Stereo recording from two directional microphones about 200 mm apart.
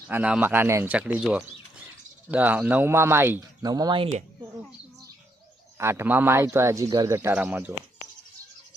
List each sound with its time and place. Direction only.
0.1 s a man's voice: 5° right (ahead or behind); by 4.1 s 25° right (ahead or behind)
5.7 s a man's voice: 15° right (ahead or behind)